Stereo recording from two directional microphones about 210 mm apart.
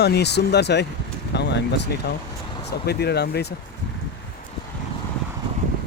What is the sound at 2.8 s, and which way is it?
Speech, 50° left (ahead or behind).